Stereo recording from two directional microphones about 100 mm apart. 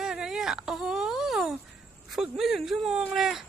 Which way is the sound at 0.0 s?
5° right (ahead or behind).